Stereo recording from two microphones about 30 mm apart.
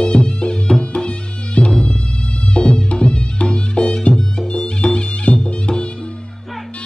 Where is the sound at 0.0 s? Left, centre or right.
Left.